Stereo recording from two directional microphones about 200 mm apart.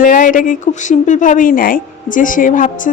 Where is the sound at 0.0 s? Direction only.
40° left (ahead or behind).